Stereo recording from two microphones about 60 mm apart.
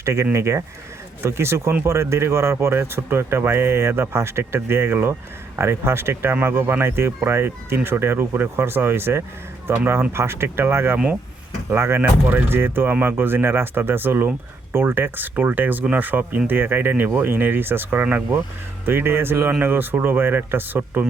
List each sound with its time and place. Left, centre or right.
0.0 s speech: right
10.9 s speech: right
11.7 s speech: right